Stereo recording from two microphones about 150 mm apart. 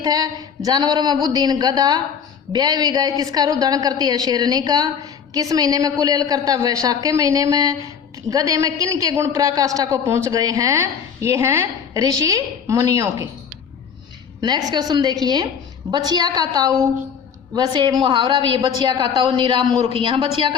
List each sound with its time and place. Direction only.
0.0 s a woman's voice: 25° right (ahead or behind)
14.4 s a woman's voice: 30° right (ahead or behind)